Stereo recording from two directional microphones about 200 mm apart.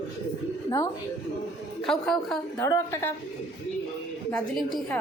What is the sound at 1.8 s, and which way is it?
Speech, centre (ahead or behind).